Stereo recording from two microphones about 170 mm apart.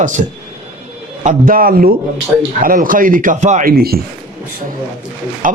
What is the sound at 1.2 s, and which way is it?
A man's voice, 55° right (ahead or behind).